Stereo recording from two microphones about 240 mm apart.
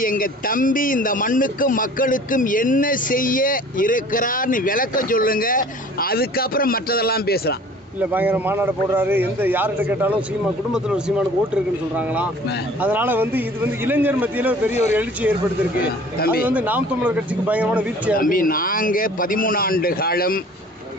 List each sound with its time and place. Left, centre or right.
0.0 s speech: left
7.9 s speech: centre
16.1 s speech: left
16.5 s speech: centre
18.1 s speech: left